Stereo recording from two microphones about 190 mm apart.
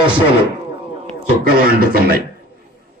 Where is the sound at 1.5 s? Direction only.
55° right (ahead or behind).